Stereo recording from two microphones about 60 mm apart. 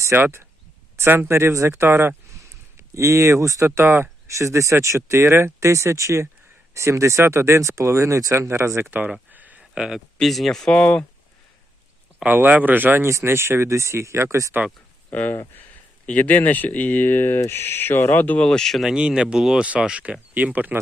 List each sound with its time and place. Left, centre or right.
0.2 s speech: right
2.7 s speech: right
3.8 s speech: right
4.4 s speech: right
8.9 s speech: right
9.3 s a sound: right
9.7 s speech: centre
10.2 s speech: centre
10.7 s speech: centre
12.2 s speech: right
13.1 s speech: right
15.1 s speech: left
18.3 s speech: centre
18.9 s speech: centre